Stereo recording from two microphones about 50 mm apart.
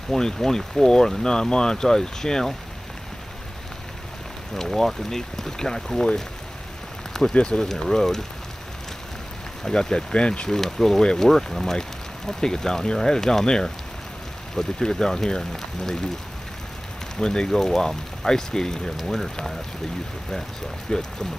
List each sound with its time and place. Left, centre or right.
0.1 s speech: centre
4.6 s speech: centre
7.3 s speech: left
7.6 s speech: centre
9.7 s speech: centre
10.5 s speech: centre
17.2 s speech: centre
20.9 s speech: centre